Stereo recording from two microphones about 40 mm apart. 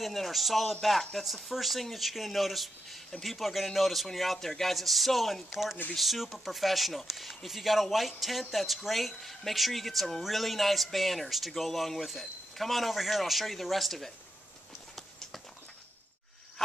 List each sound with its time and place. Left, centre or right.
0.0 s speech: centre